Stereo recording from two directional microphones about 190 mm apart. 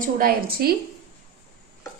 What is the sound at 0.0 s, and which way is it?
Speech, 50° right (ahead or behind).